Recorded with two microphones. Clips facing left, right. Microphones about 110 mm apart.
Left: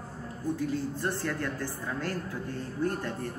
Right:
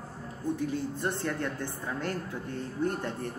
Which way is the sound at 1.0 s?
20° right (ahead or behind).